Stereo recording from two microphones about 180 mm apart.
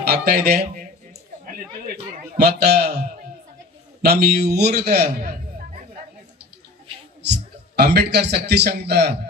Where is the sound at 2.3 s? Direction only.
60° right (ahead or behind).